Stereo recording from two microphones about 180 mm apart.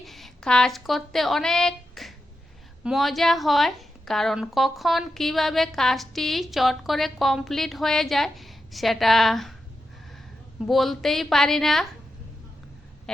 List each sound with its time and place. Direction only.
0.0 s a woman's voice: centre (ahead or behind)
10.7 s a woman's voice: centre (ahead or behind)